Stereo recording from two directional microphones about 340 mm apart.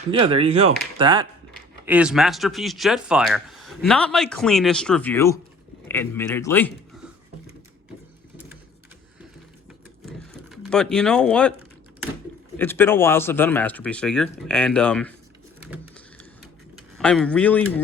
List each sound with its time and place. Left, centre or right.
0.1 s a man's voice: centre
10.1 s a sound: centre
12.5 s speech: centre
17.0 s speech: centre